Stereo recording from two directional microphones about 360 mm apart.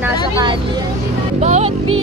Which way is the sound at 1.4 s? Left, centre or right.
Centre.